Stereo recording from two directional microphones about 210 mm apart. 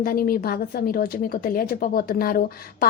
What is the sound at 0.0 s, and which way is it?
A woman's voice, 45° left (ahead or behind).